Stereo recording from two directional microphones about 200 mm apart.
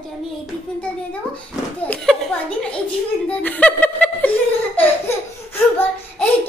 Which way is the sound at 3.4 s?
5° left (ahead or behind).